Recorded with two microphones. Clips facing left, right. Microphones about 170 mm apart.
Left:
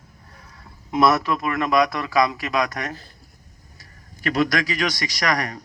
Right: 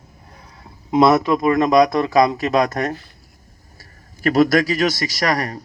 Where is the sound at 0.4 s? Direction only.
25° right (ahead or behind).